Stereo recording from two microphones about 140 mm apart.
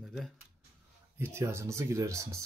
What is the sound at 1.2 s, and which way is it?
Speech, 20° right (ahead or behind).